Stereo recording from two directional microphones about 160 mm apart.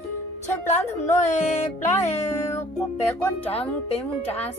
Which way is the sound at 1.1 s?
45° left (ahead or behind).